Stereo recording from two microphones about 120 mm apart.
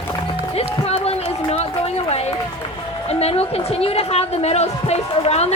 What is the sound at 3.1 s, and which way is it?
A woman's voice, 60° left (ahead or behind).